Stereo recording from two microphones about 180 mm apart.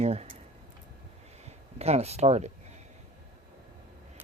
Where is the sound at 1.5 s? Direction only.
35° right (ahead or behind).